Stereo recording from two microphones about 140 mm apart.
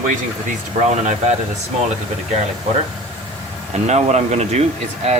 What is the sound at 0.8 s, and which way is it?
Speech, 55° right (ahead or behind).